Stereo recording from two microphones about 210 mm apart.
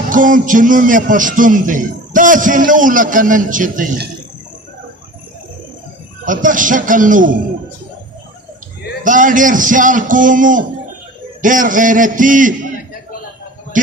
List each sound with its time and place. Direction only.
0.1 s a man's voice: 40° right (ahead or behind)
6.2 s a man's voice: 40° right (ahead or behind)
9.0 s a man's voice: 40° right (ahead or behind)
13.7 s speech: 40° right (ahead or behind)